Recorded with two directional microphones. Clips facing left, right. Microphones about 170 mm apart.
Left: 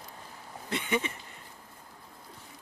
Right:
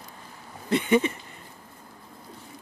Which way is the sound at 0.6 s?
35° right (ahead or behind).